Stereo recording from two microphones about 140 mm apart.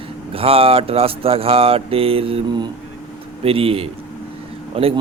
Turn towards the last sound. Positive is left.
turn(degrees=-40)  # may be behind; listen again after turning